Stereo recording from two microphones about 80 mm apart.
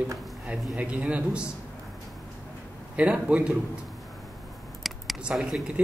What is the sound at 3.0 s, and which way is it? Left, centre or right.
Speech, centre.